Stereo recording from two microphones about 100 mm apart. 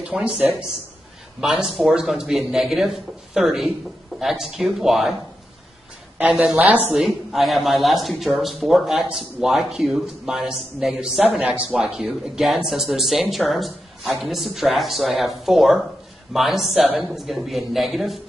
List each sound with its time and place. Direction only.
0.0 s speech: 10° right (ahead or behind)
6.1 s a woman's voice: 10° right (ahead or behind)
6.9 s speech: 5° right (ahead or behind)